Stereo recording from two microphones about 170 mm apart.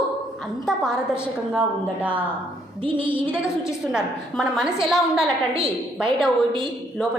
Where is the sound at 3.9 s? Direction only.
5° right (ahead or behind).